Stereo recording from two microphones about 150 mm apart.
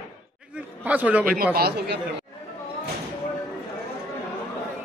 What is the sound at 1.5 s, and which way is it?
Speech, 90° right.